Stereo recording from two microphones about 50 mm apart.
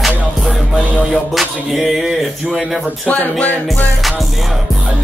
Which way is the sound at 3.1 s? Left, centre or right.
Left.